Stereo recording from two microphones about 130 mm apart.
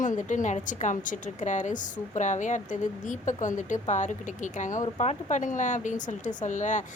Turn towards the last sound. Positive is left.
turn(degrees=70)  # may be behind; listen again after turning